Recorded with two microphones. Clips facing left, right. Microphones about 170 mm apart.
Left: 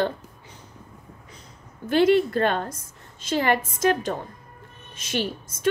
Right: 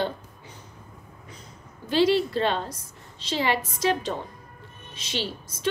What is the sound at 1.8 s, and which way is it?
A woman's voice, 55° left (ahead or behind).